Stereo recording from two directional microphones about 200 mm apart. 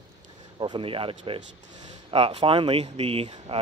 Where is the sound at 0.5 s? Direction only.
25° right (ahead or behind).